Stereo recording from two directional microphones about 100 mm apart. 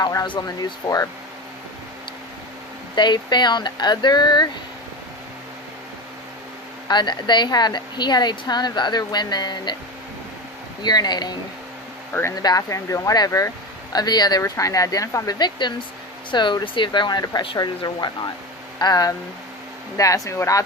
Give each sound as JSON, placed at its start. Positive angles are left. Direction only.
{"t": 0.0, "sound": "speech", "side_deg": 35}
{"t": 2.9, "sound": "a woman's voice", "side_deg": 50}
{"t": 6.8, "sound": "a woman's voice", "side_deg": 50}
{"t": 10.8, "sound": "a woman's voice", "side_deg": 45}
{"t": 12.4, "sound": "a woman's voice", "side_deg": 40}